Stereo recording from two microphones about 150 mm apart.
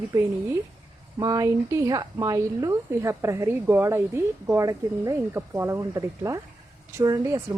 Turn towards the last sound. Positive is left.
turn(degrees=-20)  # may be behind; listen again after turning